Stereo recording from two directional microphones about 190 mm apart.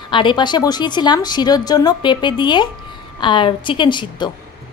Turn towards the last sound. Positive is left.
turn(degrees=25)  # may be behind; listen again after turning